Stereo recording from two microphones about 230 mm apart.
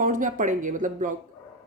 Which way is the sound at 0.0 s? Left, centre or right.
Right.